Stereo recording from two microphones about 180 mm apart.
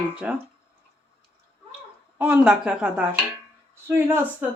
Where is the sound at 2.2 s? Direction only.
5° right (ahead or behind).